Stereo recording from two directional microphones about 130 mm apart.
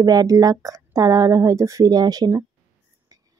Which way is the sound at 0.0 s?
30° right (ahead or behind).